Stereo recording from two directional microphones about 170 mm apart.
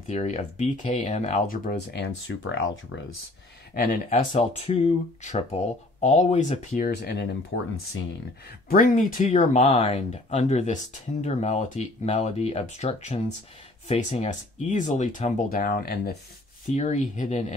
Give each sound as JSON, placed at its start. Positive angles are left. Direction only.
{"t": 0.0, "sound": "speech", "side_deg": 45}
{"t": 3.7, "sound": "speech", "side_deg": 50}
{"t": 6.7, "sound": "speech", "side_deg": 65}
{"t": 7.5, "sound": "speech", "side_deg": 90}
{"t": 8.5, "sound": "speech", "side_deg": 55}
{"t": 16.7, "sound": "speech", "side_deg": 45}